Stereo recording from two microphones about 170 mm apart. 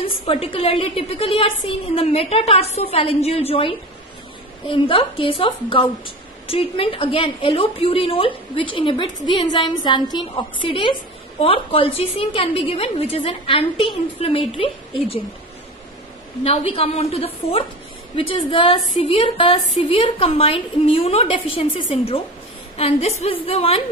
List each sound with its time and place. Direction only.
0.0 s a woman's voice: 35° left (ahead or behind)
16.4 s speech: 35° left (ahead or behind)